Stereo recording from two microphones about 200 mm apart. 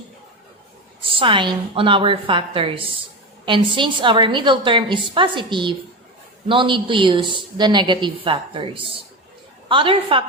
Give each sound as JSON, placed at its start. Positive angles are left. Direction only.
{"t": 1.0, "sound": "a woman's voice", "side_deg": -25}